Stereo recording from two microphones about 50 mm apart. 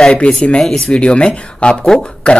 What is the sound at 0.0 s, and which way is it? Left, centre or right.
Speech, centre.